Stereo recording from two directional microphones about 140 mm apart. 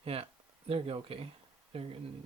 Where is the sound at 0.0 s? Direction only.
45° right (ahead or behind).